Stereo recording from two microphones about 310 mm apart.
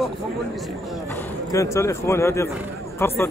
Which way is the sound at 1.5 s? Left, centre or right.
Centre.